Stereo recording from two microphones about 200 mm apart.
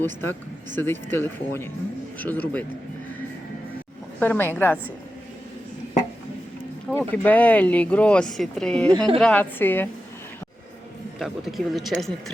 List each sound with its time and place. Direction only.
0.0 s speech: 10° left (ahead or behind)
4.2 s speech: 10° left (ahead or behind)
6.9 s speech: 10° left (ahead or behind)
11.2 s speech: centre (ahead or behind)